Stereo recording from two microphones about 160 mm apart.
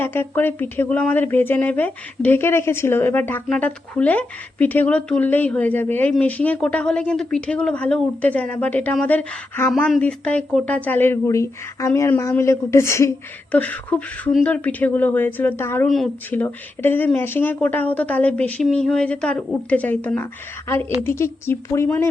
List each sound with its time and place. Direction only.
0.0 s speech: 15° left (ahead or behind)